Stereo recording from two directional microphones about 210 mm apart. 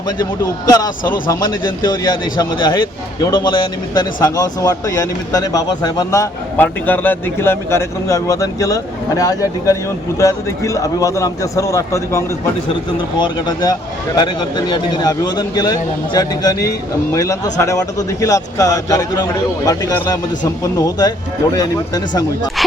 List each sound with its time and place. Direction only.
0.7 s a man's voice: 15° left (ahead or behind)